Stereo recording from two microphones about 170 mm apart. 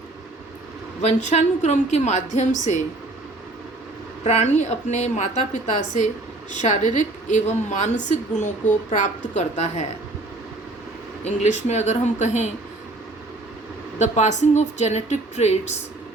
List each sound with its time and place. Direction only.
1.0 s a woman's voice: 40° left (ahead or behind)
4.2 s a woman's voice: 40° left (ahead or behind)
11.2 s a woman's voice: 40° left (ahead or behind)
14.0 s a woman's voice: 45° left (ahead or behind)